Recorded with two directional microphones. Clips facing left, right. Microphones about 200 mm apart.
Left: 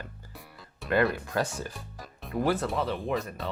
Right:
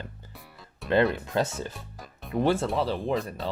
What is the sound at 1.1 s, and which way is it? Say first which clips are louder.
Speech: right 3 dB; 20° right (ahead or behind).